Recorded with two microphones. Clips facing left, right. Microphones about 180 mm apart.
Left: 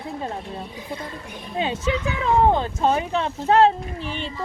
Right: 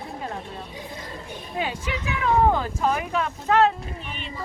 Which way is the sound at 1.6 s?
25° left (ahead or behind).